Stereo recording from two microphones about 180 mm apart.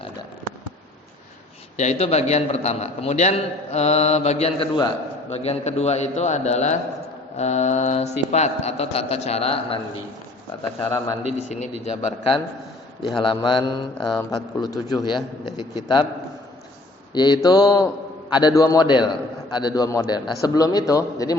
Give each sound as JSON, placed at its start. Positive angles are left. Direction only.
{"t": 1.7, "sound": "a man's voice", "side_deg": 40}
{"t": 10.8, "sound": "a man's voice", "side_deg": 15}
{"t": 11.3, "sound": "a man's voice", "side_deg": 40}
{"t": 17.2, "sound": "a man's voice", "side_deg": 25}